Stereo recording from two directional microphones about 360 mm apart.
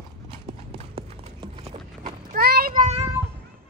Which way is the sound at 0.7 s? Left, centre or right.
Centre.